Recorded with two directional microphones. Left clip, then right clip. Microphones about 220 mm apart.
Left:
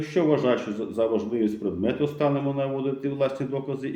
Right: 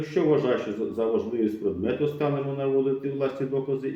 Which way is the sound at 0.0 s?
45° left (ahead or behind).